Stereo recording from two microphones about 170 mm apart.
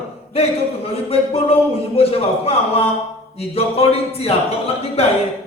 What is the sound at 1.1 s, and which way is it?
Speech, 35° left (ahead or behind).